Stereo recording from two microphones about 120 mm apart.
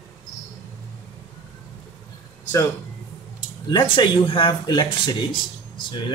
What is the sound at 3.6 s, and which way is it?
Speech, 40° left (ahead or behind).